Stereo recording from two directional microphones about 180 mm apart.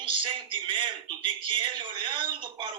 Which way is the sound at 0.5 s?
30° right (ahead or behind).